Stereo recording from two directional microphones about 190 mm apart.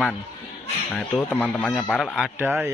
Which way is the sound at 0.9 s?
10° left (ahead or behind).